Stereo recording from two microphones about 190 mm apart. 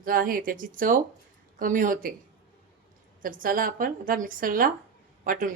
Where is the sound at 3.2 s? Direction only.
45° right (ahead or behind).